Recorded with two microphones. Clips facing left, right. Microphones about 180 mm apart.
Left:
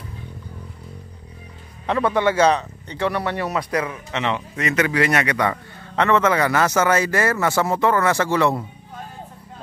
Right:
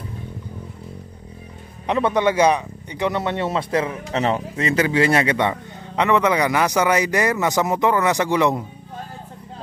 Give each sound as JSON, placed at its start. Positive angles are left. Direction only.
{"t": 1.9, "sound": "speech", "side_deg": -20}